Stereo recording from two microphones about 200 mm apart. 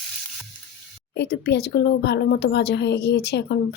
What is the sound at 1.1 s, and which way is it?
Speech, 55° left (ahead or behind).